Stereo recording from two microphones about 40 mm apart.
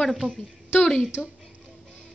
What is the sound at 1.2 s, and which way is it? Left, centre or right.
Speech, centre.